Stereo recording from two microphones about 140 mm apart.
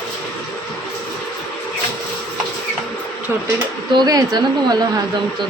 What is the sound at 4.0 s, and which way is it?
Speech, 30° right (ahead or behind).